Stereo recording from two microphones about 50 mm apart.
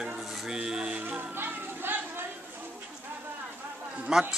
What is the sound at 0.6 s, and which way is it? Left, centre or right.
Speech, centre.